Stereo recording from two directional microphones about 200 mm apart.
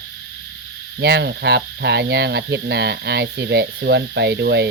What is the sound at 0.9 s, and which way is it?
Speech, 55° right (ahead or behind).